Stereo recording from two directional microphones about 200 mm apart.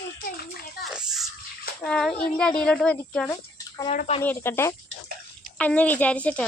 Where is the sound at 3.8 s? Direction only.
35° left (ahead or behind).